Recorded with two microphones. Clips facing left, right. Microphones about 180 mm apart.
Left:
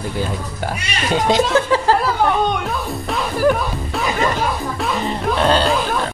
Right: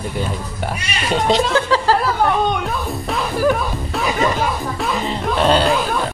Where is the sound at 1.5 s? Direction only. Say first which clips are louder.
Left 1 dB; 20° left (ahead or behind).